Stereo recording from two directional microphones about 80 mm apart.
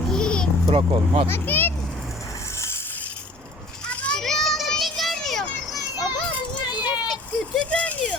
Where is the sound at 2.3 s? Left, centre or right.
Left.